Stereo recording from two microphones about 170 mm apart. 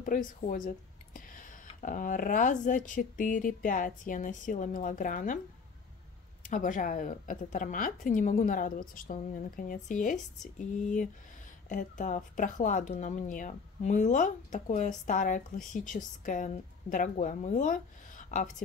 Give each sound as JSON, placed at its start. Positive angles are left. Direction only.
{"t": 0.0, "sound": "speech", "side_deg": 50}
{"t": 6.5, "sound": "speech", "side_deg": 50}
{"t": 11.7, "sound": "speech", "side_deg": 50}